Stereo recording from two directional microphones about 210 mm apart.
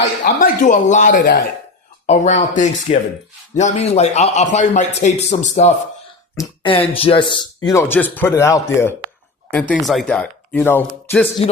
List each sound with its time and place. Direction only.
0.3 s speech: 40° left (ahead or behind); by 11.3 s 10° left (ahead or behind)